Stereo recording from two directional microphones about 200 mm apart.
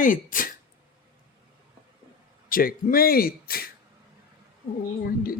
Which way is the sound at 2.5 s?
45° left (ahead or behind).